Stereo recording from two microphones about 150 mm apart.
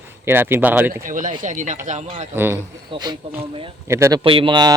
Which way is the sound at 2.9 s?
30° right (ahead or behind).